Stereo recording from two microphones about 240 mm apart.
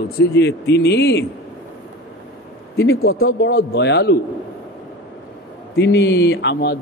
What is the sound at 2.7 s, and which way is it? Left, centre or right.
Speech, left.